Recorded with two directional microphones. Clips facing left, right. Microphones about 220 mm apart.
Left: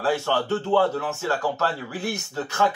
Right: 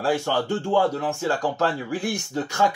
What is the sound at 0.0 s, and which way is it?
Speech, 15° right (ahead or behind).